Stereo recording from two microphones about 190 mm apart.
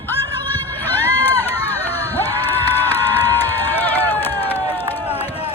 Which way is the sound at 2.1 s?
10° left (ahead or behind).